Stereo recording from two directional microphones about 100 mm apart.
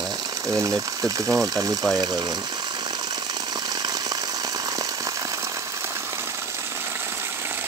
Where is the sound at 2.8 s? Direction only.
45° right (ahead or behind).